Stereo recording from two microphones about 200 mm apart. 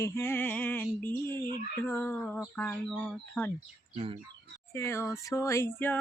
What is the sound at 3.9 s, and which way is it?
Speech, 30° right (ahead or behind).